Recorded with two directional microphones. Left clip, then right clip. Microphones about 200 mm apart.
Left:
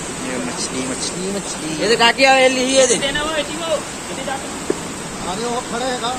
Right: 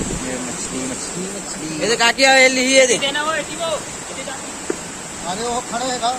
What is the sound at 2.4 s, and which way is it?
Speech, 60° right (ahead or behind).